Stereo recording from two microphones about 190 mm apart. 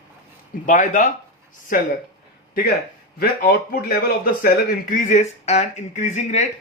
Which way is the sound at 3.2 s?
55° left (ahead or behind).